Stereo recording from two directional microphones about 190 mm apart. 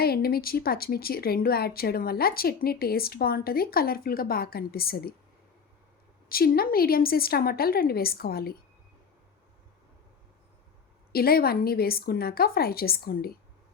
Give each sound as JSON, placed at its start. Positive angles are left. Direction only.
{"t": 0.0, "sound": "speech", "side_deg": 55}
{"t": 6.2, "sound": "speech", "side_deg": 50}
{"t": 11.1, "sound": "speech", "side_deg": 55}